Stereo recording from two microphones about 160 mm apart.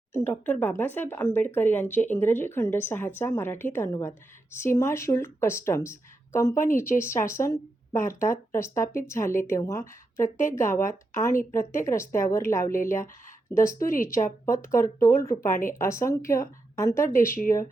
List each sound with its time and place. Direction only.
0.3 s speech: 10° left (ahead or behind)
10.2 s speech: 55° left (ahead or behind)
10.5 s a woman's voice: 15° left (ahead or behind)
13.8 s speech: 60° left (ahead or behind)
14.4 s speech: 15° left (ahead or behind)
17.1 s speech: 60° left (ahead or behind)